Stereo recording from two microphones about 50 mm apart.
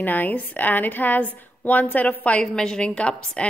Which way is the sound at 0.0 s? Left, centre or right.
Left.